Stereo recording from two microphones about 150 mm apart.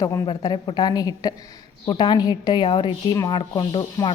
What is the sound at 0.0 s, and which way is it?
A woman's voice, 20° left (ahead or behind).